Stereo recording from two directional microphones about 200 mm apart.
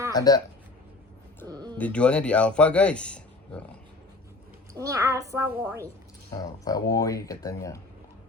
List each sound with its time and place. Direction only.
0.1 s speech: 20° left (ahead or behind)
1.5 s a sound: 20° right (ahead or behind)
1.8 s speech: 5° left (ahead or behind)
4.7 s a child's voice: 15° right (ahead or behind)
6.3 s speech: 20° left (ahead or behind)